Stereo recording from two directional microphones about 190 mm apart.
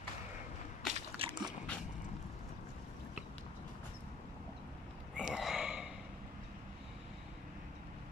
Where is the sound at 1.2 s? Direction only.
30° right (ahead or behind).